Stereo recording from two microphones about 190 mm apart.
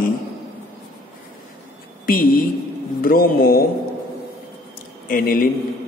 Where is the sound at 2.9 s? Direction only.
50° left (ahead or behind).